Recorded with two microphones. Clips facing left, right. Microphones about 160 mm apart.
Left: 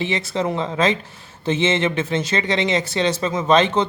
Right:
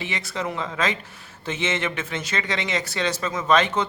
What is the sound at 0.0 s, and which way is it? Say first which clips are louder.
Speech: left 7 dB; 25° left (ahead or behind).